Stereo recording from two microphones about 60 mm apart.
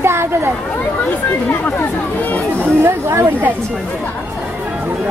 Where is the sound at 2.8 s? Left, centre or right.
Right.